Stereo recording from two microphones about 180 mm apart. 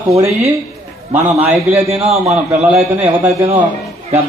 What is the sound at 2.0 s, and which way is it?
Speech, 35° right (ahead or behind).